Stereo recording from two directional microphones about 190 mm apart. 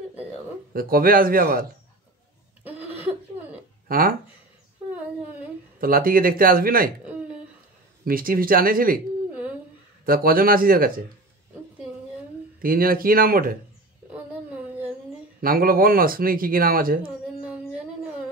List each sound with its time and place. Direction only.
0.7 s speech: 50° right (ahead or behind)
3.8 s speech: 50° right (ahead or behind)
5.8 s speech: 50° right (ahead or behind)
8.0 s speech: 50° right (ahead or behind)
9.3 s a sound: 10° right (ahead or behind)
10.0 s speech: 50° right (ahead or behind)
12.6 s speech: 50° right (ahead or behind)
14.1 s a sound: 10° right (ahead or behind)
15.4 s speech: 50° right (ahead or behind)
17.4 s a sound: 5° right (ahead or behind)